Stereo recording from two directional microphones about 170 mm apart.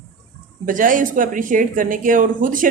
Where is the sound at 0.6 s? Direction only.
50° right (ahead or behind).